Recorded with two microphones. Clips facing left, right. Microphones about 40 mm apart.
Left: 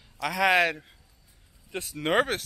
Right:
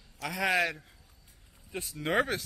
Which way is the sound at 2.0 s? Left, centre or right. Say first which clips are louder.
Left 4 dB; left.